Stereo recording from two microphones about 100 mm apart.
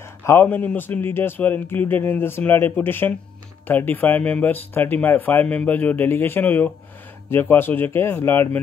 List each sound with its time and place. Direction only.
0.2 s speech: 25° left (ahead or behind)